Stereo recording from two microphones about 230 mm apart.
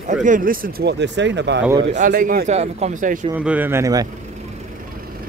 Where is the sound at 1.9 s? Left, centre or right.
Right.